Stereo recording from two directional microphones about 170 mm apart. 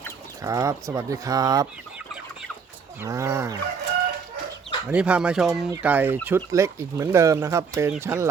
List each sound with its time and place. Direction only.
0.4 s speech: 20° right (ahead or behind)
3.0 s speech: 15° right (ahead or behind)
4.9 s speech: 5° right (ahead or behind)